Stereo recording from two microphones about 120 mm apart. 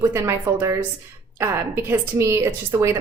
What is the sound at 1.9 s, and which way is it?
A woman's voice, 25° right (ahead or behind).